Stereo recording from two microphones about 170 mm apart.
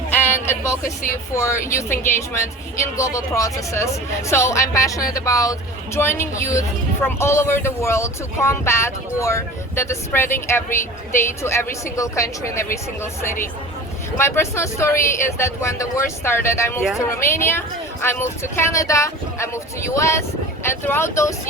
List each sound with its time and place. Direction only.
0.1 s a sound: 15° left (ahead or behind)
0.9 s speech: 15° left (ahead or behind)
14.2 s speech: 15° left (ahead or behind)